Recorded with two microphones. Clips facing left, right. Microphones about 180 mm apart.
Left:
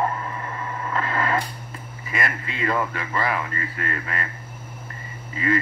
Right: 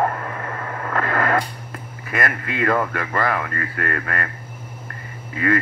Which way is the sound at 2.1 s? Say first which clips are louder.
Right 4 dB; 55° right (ahead or behind).